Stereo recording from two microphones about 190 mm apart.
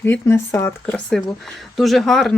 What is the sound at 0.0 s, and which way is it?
Speech, 10° left (ahead or behind).